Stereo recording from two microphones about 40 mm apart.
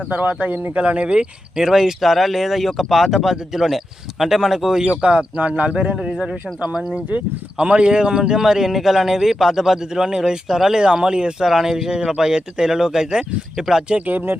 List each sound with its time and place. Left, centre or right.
0.1 s speech: right
0.8 s speech: right; by 4.9 s centre
4.9 s speech: right; by 6.8 s centre
7.6 s speech: right; by 9.1 s centre
9.1 s speech: centre
11.4 s speech: centre
14.1 s speech: right